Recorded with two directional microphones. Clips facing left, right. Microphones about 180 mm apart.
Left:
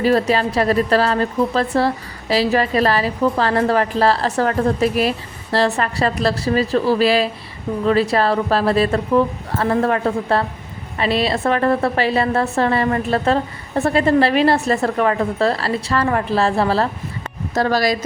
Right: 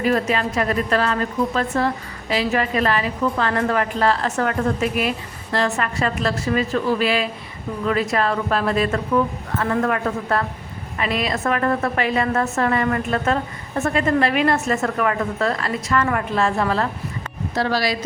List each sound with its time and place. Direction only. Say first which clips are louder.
0.0 s a woman's voice: left 4 dB; 35° left (ahead or behind)
17.5 s speech: left 4 dB; 45° left (ahead or behind)